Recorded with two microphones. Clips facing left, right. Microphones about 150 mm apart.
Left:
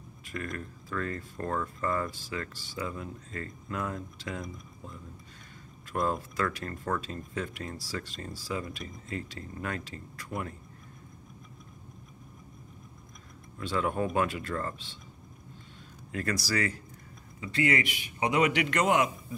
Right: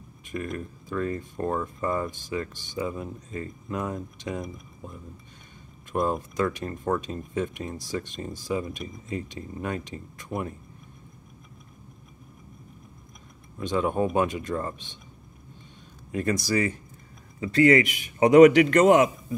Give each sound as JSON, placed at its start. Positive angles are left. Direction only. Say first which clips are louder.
{"t": 0.3, "sound": "speech", "louder": "right 5 dB", "side_deg": -20}
{"t": 13.6, "sound": "speech", "louder": "right 5 dB", "side_deg": -20}
{"t": 16.1, "sound": "speech", "louder": "right 6 dB", "side_deg": -20}
{"t": 17.4, "sound": "a man's voice", "louder": "right 10 dB", "side_deg": -40}